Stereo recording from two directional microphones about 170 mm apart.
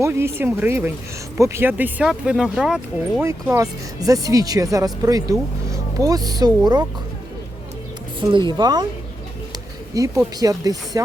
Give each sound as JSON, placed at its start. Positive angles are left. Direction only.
{"t": 0.0, "sound": "speech", "side_deg": -15}
{"t": 3.4, "sound": "speech", "side_deg": -15}
{"t": 8.3, "sound": "speech", "side_deg": -25}
{"t": 9.9, "sound": "speech", "side_deg": -20}